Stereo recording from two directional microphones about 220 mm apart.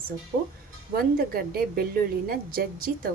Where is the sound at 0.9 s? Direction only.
45° right (ahead or behind).